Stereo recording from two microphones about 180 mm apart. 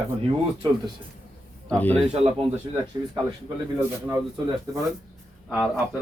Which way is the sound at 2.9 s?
15° right (ahead or behind).